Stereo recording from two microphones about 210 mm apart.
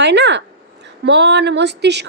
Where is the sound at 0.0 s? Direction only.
55° right (ahead or behind).